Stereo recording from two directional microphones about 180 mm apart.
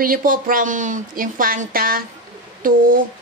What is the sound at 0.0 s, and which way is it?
A woman's voice, 50° right (ahead or behind).